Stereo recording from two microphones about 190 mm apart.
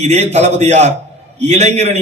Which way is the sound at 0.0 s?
35° right (ahead or behind).